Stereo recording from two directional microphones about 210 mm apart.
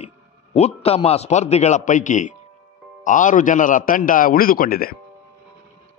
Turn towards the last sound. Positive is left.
turn(degrees=45)  # may be behind; listen again after turning